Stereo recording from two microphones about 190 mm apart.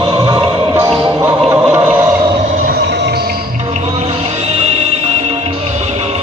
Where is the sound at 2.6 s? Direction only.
60° right (ahead or behind).